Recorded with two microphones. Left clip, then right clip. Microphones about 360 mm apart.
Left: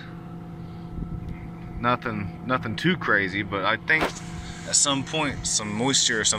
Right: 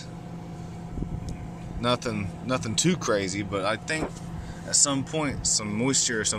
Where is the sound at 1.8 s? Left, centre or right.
Centre.